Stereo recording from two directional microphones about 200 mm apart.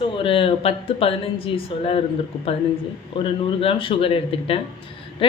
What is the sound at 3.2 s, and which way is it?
A woman's voice, 25° left (ahead or behind).